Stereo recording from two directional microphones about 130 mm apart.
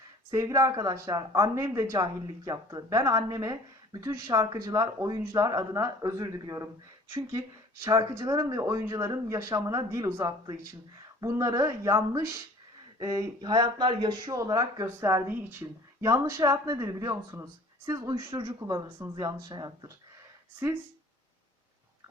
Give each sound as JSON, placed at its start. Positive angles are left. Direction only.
{"t": 0.3, "sound": "speech", "side_deg": -25}